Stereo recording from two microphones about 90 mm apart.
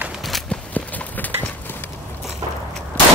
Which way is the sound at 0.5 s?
15° left (ahead or behind).